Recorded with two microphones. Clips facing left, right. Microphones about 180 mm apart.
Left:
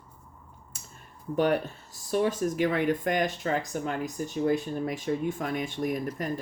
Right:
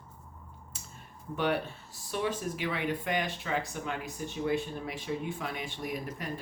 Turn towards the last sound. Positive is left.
turn(degrees=45)  # may be behind; listen again after turning